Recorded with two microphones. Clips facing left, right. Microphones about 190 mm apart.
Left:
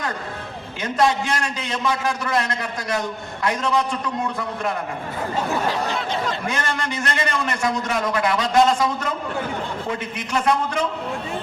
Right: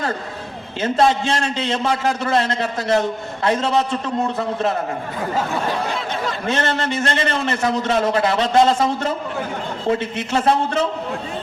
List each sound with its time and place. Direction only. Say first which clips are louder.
0.8 s a man's voice: right 3 dB; 25° right (ahead or behind)
6.5 s a man's voice: right 5 dB; 25° right (ahead or behind)